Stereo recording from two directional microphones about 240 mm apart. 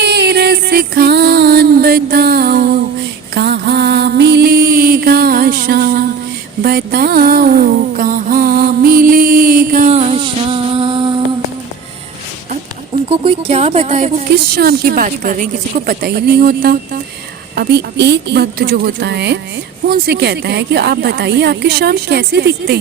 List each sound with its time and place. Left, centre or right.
0.0 s music: right
3.3 s mantra: right
6.6 s a sound: right
13.1 s speech: right
14.5 s a woman's voice: right